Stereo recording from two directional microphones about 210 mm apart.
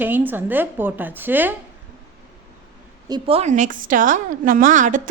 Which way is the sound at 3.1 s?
25° right (ahead or behind).